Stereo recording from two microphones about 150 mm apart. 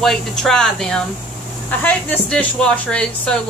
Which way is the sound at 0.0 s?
Centre (ahead or behind).